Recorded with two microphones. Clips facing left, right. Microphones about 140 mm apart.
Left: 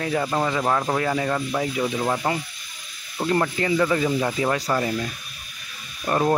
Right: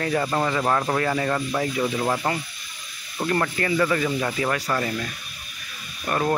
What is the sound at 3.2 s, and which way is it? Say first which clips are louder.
Speech: left 2 dB; 15° left (ahead or behind).